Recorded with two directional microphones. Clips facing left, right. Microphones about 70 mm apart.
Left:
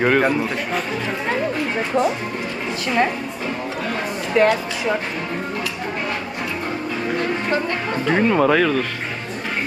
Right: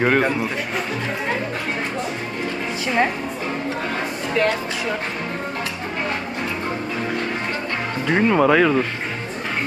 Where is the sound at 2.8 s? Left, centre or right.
Centre.